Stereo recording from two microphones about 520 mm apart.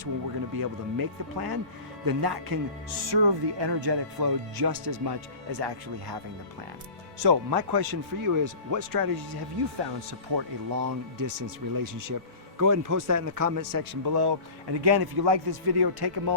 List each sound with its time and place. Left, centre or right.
0.6 s speech: right
7.2 s speech: right